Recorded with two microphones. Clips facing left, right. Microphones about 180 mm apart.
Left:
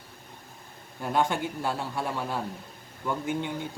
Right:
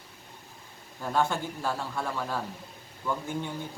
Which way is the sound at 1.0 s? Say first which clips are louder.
Left 1 dB; 15° left (ahead or behind).